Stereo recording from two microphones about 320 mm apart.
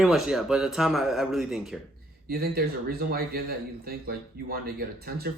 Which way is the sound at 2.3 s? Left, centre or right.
Right.